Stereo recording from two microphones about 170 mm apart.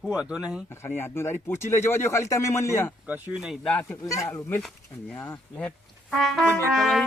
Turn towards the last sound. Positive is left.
turn(degrees=0)  # may be behind; listen again after turning